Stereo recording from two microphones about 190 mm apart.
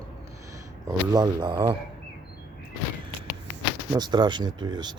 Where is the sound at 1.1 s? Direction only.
20° right (ahead or behind).